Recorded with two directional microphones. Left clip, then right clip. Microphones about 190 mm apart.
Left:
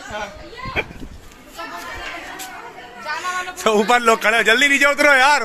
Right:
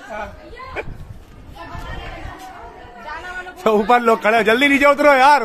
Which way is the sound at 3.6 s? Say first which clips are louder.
Right 2 dB; 10° right (ahead or behind).